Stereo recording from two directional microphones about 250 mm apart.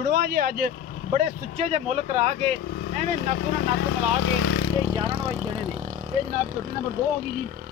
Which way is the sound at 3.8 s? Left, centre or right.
Left.